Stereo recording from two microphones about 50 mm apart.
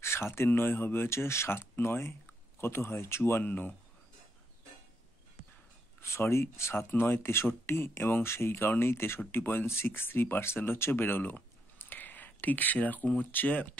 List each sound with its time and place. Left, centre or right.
0.0 s a sound: left
0.5 s speech: left
1.0 s speech: left
3.4 s speech: left
5.9 s speech: left
6.9 s speech: left